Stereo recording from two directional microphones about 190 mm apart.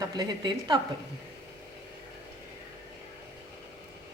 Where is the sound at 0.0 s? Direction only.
20° right (ahead or behind).